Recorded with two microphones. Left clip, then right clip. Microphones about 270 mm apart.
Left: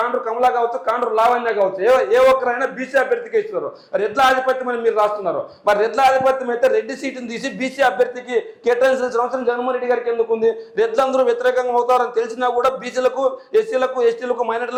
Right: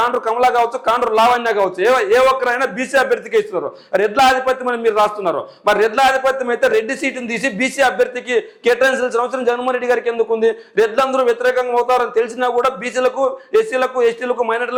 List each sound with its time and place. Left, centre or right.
0.0 s a man's voice: right